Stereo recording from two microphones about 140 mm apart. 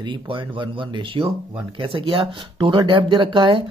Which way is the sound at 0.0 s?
35° right (ahead or behind).